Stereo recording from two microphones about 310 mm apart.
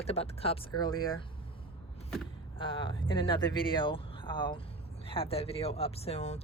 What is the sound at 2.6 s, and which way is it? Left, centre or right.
Speech, centre.